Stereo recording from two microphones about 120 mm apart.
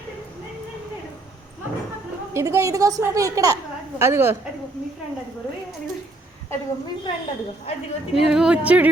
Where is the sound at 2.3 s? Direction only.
25° right (ahead or behind).